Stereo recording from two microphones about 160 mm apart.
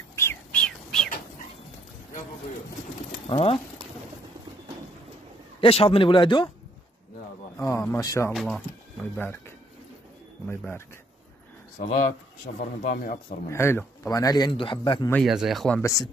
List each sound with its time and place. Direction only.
0.1 s bird: 15° left (ahead or behind)
3.3 s speech: 40° left (ahead or behind)
5.6 s speech: 35° left (ahead or behind)
7.5 s speech: 15° left (ahead or behind)
8.3 s speech: centre (ahead or behind)
9.1 s speech: 15° left (ahead or behind)
10.4 s speech: 10° left (ahead or behind)
12.5 s speech: 70° left (ahead or behind)
13.5 s speech: 15° left (ahead or behind); by 15.0 s 30° left (ahead or behind)
15.2 s speech: centre (ahead or behind)
15.8 s speech: 20° left (ahead or behind)